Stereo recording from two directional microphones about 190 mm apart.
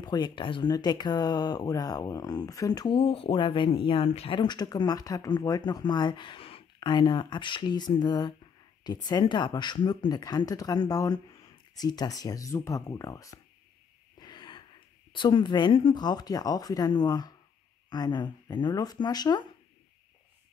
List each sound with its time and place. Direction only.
0.0 s speech: 20° left (ahead or behind)
14.1 s wheeze: 25° left (ahead or behind)
15.1 s speech: 25° left (ahead or behind)